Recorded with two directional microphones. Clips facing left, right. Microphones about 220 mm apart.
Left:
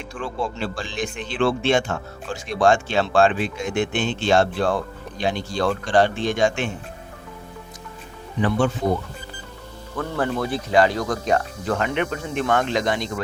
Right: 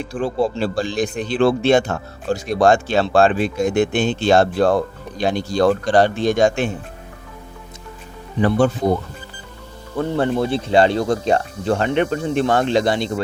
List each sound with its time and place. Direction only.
0.0 s speech: 35° right (ahead or behind)
8.4 s speech: 40° right (ahead or behind)
10.0 s speech: 25° right (ahead or behind)